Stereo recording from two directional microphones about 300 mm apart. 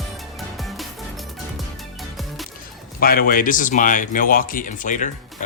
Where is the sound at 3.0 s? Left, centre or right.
Left.